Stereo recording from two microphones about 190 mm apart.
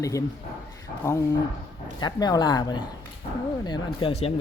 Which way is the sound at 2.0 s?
20° left (ahead or behind).